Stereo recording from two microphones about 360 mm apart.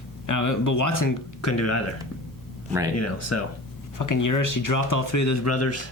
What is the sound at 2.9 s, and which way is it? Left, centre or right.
Speech, left.